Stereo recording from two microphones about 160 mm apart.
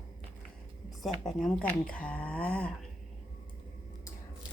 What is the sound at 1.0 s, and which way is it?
Speech, centre (ahead or behind).